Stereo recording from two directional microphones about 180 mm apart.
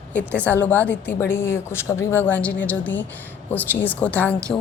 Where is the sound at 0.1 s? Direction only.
10° left (ahead or behind).